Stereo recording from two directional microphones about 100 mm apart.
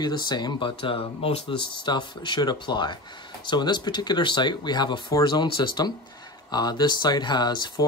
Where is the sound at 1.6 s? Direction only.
50° left (ahead or behind).